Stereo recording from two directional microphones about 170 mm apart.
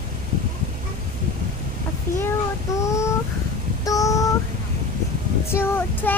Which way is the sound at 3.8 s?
20° left (ahead or behind).